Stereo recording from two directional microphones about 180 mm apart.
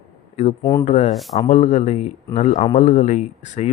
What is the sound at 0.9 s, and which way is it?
Speech, 40° left (ahead or behind).